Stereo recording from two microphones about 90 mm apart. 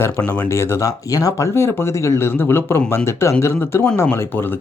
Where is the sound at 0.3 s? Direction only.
25° left (ahead or behind).